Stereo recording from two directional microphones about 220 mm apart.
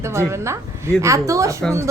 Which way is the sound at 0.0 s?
10° right (ahead or behind).